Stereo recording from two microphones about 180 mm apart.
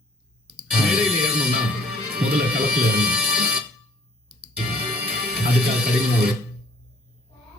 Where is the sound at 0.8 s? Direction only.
5° right (ahead or behind).